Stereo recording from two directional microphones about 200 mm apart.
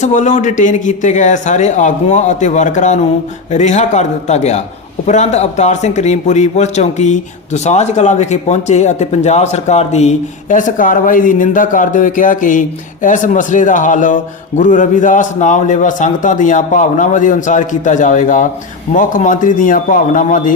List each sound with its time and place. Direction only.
0.0 s a man's voice: 40° left (ahead or behind)